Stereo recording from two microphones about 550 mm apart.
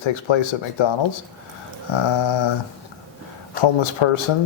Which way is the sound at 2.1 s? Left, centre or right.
Left.